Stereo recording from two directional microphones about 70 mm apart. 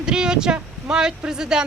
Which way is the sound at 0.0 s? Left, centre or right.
Centre.